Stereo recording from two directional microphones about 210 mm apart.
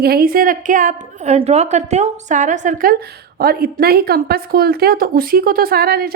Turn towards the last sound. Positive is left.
turn(degrees=-45)  # may be behind; listen again after turning